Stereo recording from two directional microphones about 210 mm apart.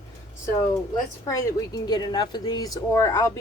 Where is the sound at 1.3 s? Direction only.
15° left (ahead or behind).